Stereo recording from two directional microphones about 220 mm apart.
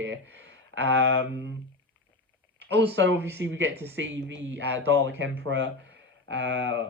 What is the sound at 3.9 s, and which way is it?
Speech, 55° right (ahead or behind).